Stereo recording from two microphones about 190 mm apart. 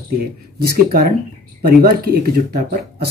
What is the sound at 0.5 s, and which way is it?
Speech, 55° right (ahead or behind).